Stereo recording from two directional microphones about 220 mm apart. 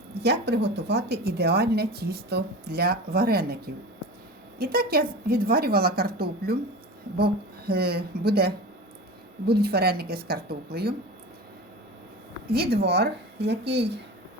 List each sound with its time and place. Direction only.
0.1 s a woman's voice: 50° right (ahead or behind)
12.5 s a woman's voice: 45° right (ahead or behind)